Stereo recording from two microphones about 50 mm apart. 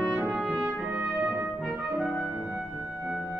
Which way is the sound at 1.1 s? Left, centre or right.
Centre.